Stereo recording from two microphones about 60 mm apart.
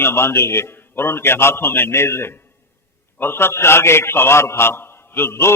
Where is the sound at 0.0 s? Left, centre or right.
Left.